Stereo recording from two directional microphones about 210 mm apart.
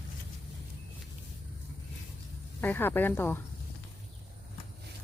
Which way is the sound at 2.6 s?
10° left (ahead or behind).